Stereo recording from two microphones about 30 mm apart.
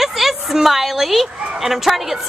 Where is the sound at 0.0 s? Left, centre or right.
Centre.